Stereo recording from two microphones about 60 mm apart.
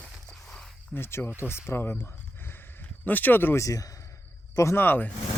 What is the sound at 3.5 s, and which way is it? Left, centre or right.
Speech, left.